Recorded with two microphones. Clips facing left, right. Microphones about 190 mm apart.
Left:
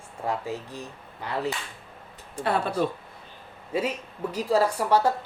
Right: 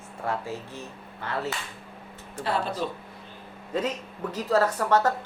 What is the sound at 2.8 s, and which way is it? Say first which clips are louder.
Speech: left 5 dB; 55° left (ahead or behind).